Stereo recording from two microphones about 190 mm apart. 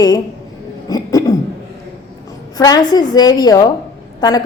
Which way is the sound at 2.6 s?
20° left (ahead or behind).